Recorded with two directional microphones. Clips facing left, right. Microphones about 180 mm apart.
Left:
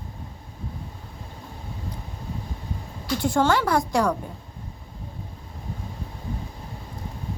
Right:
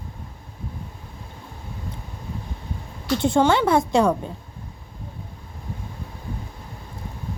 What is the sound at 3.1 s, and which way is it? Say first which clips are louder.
A woman's voice: right 3 dB; 25° right (ahead or behind).